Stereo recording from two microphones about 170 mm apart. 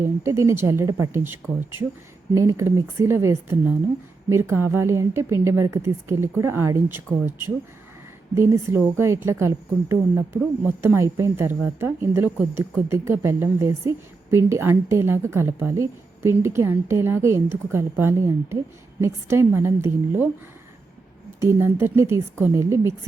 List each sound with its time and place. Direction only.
0.0 s speech: 15° right (ahead or behind)
8.4 s speech: 15° right (ahead or behind)
21.4 s speech: 15° right (ahead or behind)